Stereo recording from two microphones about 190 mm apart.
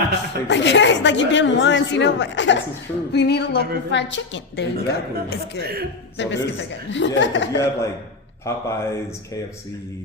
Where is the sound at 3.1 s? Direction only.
60° left (ahead or behind).